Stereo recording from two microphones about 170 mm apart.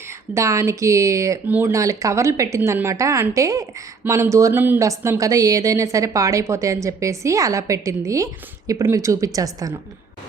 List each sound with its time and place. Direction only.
0.3 s speech: 20° right (ahead or behind)